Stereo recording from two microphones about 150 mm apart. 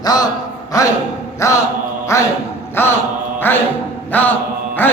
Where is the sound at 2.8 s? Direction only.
15° left (ahead or behind).